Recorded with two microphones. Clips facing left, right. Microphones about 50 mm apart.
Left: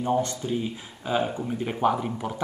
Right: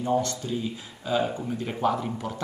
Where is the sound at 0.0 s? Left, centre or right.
Left.